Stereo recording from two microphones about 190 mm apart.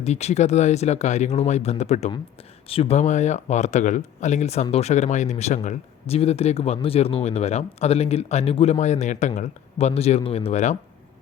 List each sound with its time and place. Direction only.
0.0 s speech: 35° left (ahead or behind)